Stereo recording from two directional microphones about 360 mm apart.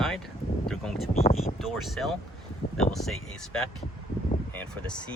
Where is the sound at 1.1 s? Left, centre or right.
Centre.